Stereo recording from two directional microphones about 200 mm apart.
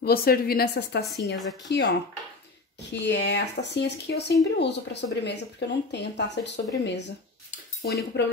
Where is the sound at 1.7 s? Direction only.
60° left (ahead or behind).